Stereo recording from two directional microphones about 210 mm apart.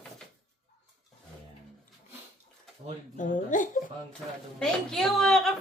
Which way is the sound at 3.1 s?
40° left (ahead or behind).